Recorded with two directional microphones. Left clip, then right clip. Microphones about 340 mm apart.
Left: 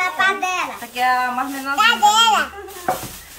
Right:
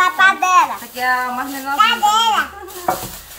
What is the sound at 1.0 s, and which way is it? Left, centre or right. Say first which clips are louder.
Speech: left 1 dB; centre.